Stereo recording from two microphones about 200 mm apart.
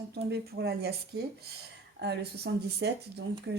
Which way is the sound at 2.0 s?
55° right (ahead or behind).